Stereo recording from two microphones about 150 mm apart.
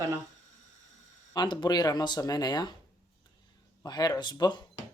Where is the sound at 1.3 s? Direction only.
30° left (ahead or behind).